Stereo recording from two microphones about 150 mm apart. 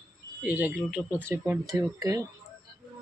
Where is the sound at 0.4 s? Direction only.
10° right (ahead or behind).